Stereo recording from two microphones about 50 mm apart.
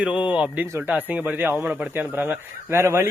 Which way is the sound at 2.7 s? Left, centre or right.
Right.